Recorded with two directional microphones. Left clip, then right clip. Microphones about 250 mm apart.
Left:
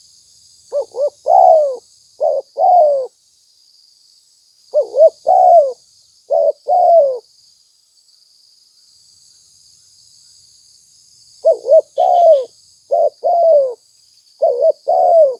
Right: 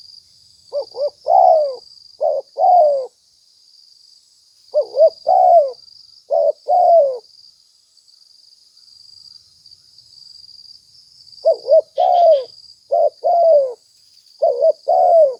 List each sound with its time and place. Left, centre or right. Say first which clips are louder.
0.9 s owl: left 3 dB; left
4.7 s owl: left 3 dB; left
6.2 s bird: left 2 dB; left
11.4 s owl: left 3 dB; left
13.4 s bird: left 2 dB; left
14.3 s owl: left 2 dB; left
15.0 s bird: left 2 dB; left